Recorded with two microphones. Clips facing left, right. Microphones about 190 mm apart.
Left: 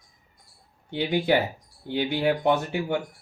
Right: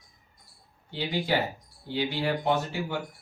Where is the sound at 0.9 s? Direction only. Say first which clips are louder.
Left 5 dB; 60° left (ahead or behind).